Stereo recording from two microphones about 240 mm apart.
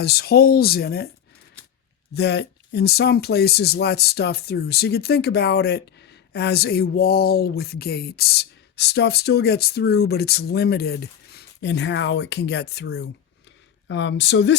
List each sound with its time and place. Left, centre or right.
0.0 s speech: left
2.1 s speech: left